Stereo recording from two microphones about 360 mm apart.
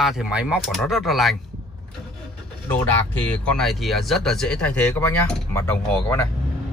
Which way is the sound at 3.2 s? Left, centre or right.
Centre.